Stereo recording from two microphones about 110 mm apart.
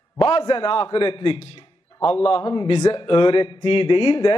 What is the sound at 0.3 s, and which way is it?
A man's voice, 55° left (ahead or behind).